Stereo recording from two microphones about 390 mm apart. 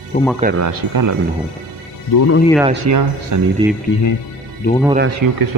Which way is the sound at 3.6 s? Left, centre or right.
Centre.